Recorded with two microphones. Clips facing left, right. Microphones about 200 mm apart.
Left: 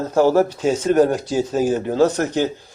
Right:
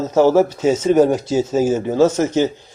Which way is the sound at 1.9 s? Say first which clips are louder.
Right 3 dB; 15° left (ahead or behind).